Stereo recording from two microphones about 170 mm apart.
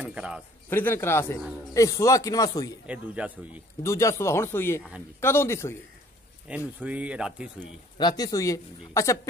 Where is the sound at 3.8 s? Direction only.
15° left (ahead or behind).